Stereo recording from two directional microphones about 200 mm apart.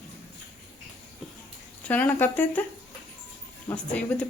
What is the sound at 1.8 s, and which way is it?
Speech, 10° left (ahead or behind).